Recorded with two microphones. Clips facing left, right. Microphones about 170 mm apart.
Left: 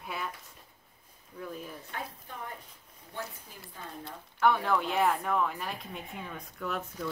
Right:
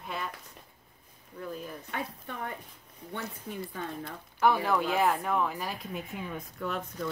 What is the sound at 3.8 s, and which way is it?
Speech, 75° right (ahead or behind).